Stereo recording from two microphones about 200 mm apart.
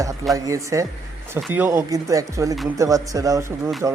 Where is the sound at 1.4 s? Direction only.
5° right (ahead or behind).